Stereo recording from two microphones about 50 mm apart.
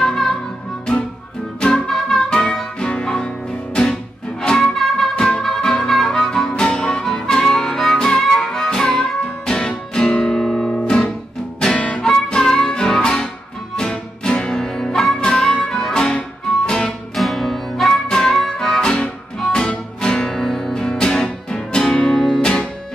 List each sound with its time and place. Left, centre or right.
0.0 s music: centre
1.6 s music: centre
10.9 s music: centre
17.1 s music: centre